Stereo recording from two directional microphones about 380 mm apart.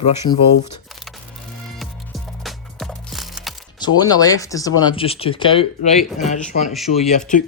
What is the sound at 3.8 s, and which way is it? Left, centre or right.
Speech, centre.